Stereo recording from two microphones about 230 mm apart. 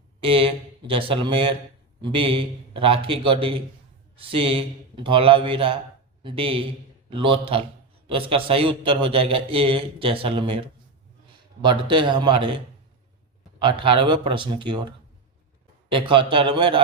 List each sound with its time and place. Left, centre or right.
0.2 s a man's voice: right
13.6 s a man's voice: right